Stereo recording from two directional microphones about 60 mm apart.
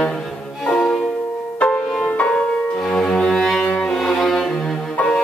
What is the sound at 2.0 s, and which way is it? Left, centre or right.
Cello, left.